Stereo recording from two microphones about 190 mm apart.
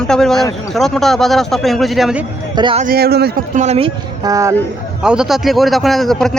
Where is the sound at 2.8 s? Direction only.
50° right (ahead or behind).